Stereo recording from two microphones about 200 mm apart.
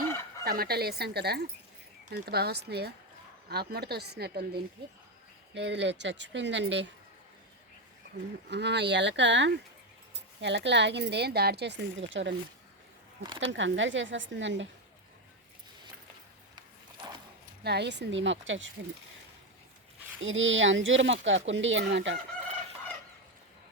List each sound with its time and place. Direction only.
0.4 s speech: 50° right (ahead or behind); by 6.8 s 65° right (ahead or behind)
8.4 s speech: 60° right (ahead or behind)
13.4 s speech: 65° right (ahead or behind)
17.6 s speech: 55° right (ahead or behind)
20.2 s speech: 75° right (ahead or behind)